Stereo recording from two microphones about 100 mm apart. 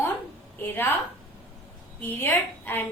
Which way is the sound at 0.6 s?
20° left (ahead or behind).